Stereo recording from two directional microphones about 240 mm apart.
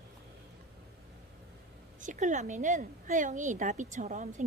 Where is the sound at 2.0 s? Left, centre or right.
Right.